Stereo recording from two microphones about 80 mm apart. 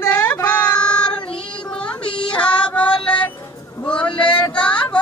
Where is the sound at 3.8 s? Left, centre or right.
Centre.